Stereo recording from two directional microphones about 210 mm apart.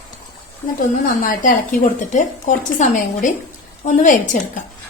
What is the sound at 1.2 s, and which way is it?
A woman's voice, 40° left (ahead or behind).